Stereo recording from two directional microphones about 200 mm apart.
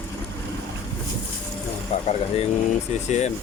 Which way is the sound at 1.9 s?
35° left (ahead or behind).